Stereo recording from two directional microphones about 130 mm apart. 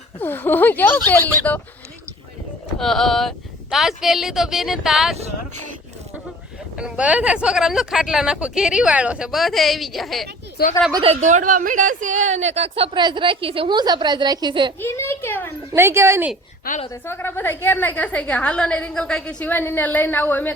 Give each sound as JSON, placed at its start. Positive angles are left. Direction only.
{"t": 0.2, "sound": "a woman's voice", "side_deg": 15}
{"t": 2.7, "sound": "speech", "side_deg": 5}
{"t": 5.1, "sound": "a sound", "side_deg": -55}
{"t": 6.7, "sound": "speech", "side_deg": -10}
{"t": 11.0, "sound": "a woman's voice", "side_deg": -60}
{"t": 14.8, "sound": "a woman's voice", "side_deg": 20}
{"t": 15.7, "sound": "speech", "side_deg": -20}
{"t": 16.9, "sound": "a woman's voice", "side_deg": 20}